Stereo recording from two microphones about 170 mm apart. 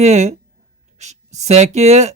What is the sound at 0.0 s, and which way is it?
Speech, 40° right (ahead or behind).